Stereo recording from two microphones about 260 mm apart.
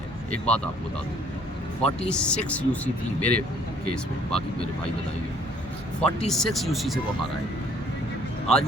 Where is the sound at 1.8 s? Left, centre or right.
Centre.